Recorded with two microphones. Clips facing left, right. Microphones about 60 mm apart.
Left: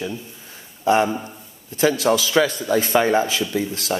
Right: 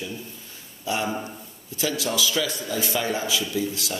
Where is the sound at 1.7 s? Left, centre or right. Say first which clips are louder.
Left 8 dB; left.